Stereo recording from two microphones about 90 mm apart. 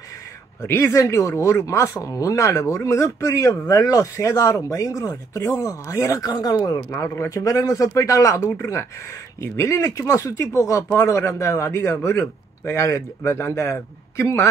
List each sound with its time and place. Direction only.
0.6 s speech: 30° left (ahead or behind)